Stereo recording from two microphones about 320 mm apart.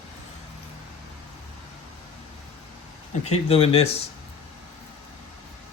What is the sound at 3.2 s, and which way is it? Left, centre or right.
Speech, centre.